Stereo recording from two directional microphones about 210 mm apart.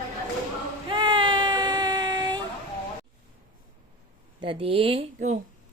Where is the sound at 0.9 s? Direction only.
20° right (ahead or behind).